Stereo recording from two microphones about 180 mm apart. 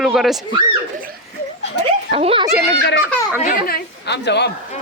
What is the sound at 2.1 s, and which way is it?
Children playing, 35° right (ahead or behind).